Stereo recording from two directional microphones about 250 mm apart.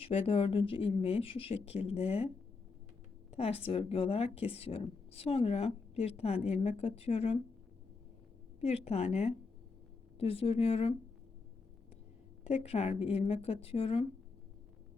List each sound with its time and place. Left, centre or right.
0.0 s a woman's voice: left
3.3 s a woman's voice: left
8.6 s a woman's voice: left
12.6 s a woman's voice: left